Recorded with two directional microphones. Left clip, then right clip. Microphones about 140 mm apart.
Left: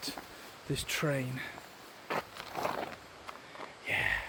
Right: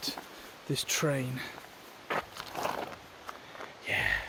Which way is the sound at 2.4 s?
15° left (ahead or behind).